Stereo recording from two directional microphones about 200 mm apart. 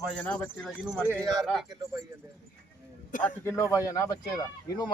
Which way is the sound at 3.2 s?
10° left (ahead or behind).